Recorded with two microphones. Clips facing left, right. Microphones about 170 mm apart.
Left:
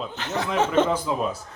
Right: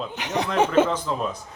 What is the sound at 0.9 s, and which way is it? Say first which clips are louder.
Speech: left 1 dB; 10° left (ahead or behind).